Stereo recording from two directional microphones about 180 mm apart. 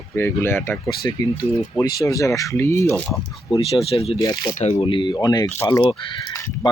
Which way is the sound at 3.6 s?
35° left (ahead or behind).